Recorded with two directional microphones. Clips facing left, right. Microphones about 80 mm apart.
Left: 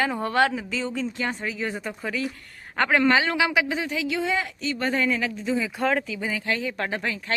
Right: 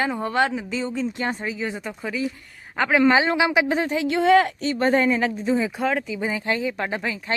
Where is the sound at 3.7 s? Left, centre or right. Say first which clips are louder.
Right 5 dB; right.